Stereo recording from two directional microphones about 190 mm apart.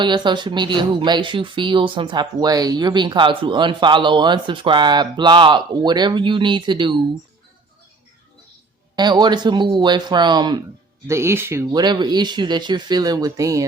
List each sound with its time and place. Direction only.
0.0 s speech: 25° right (ahead or behind)
9.0 s speech: 20° right (ahead or behind)